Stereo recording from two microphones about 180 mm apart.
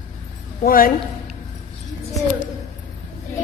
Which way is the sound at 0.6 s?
55° left (ahead or behind).